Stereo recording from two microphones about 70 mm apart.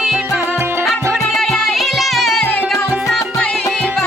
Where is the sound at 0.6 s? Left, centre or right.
Right.